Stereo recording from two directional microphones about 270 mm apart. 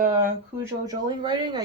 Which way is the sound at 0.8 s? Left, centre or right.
Centre.